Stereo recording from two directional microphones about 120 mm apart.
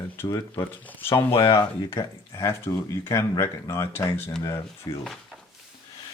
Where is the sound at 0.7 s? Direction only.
15° left (ahead or behind).